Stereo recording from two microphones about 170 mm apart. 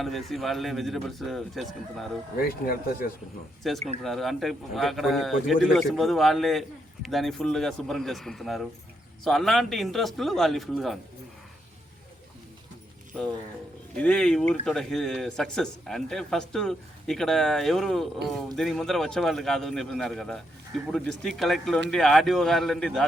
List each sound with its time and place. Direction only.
0.0 s a man's voice: centre (ahead or behind)
2.4 s speech: 60° left (ahead or behind)
3.6 s a man's voice: centre (ahead or behind)
13.9 s a man's voice: 5° left (ahead or behind)